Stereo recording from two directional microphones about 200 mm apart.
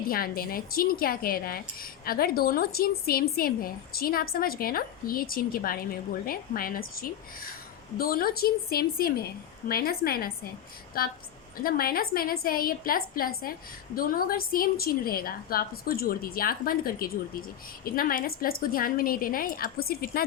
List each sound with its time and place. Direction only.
0.1 s speech: 45° left (ahead or behind)